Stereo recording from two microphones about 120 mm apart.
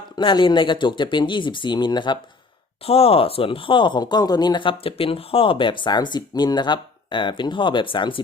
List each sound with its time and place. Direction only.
0.2 s speech: 45° left (ahead or behind)
2.8 s speech: 55° left (ahead or behind)